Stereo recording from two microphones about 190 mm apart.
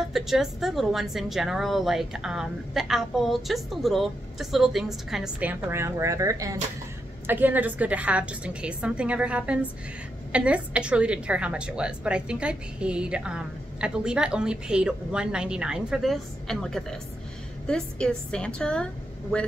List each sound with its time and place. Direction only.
0.0 s a woman's voice: centre (ahead or behind)